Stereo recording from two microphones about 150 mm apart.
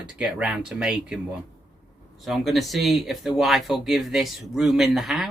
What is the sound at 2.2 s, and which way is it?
Speech, centre (ahead or behind).